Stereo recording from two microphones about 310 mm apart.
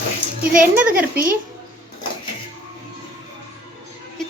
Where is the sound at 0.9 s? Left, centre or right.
Right.